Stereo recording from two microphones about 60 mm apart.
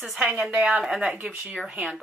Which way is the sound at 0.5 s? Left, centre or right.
Centre.